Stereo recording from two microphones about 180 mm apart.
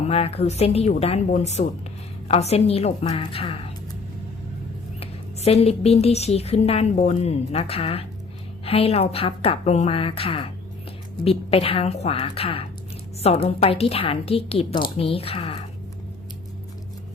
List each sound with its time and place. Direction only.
0.1 s a woman's voice: 35° left (ahead or behind)
4.9 s a woman's voice: 35° left (ahead or behind)